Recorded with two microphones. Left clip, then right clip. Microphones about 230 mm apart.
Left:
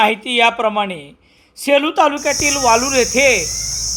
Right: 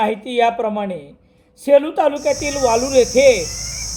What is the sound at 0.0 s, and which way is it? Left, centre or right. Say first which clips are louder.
Cricket: left 3 dB; centre.